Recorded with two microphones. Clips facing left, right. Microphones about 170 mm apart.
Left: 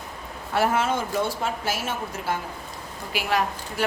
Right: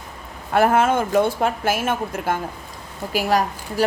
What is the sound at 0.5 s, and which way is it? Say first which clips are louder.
A woman's voice: right 6 dB; 55° right (ahead or behind).